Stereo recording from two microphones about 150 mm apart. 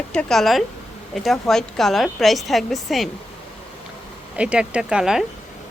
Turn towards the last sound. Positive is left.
turn(degrees=-5)  # may be behind; listen again after turning